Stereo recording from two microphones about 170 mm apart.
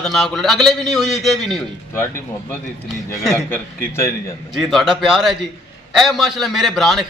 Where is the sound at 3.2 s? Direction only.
Centre (ahead or behind).